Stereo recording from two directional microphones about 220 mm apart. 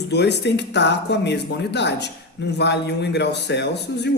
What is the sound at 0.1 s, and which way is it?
Speech, 50° left (ahead or behind).